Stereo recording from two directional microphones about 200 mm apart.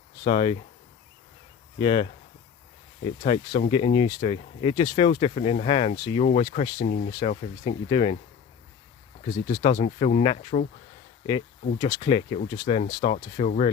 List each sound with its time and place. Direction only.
0.3 s speech: 25° left (ahead or behind)
1.8 s speech: 25° left (ahead or behind)
9.2 s speech: 25° left (ahead or behind)